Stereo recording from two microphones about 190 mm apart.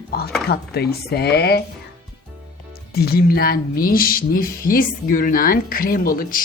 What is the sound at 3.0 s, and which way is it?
Music, 55° left (ahead or behind).